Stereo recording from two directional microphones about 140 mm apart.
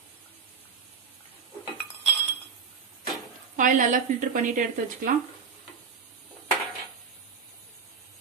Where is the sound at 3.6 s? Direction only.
70° right (ahead or behind).